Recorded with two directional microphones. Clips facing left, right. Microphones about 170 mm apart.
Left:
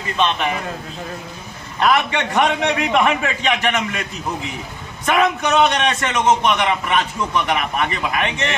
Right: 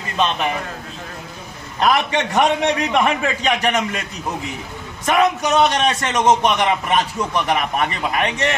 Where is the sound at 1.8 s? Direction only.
40° right (ahead or behind).